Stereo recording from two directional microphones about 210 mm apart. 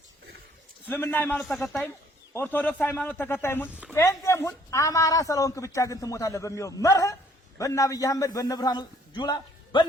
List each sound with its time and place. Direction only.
0.9 s speech: 10° left (ahead or behind)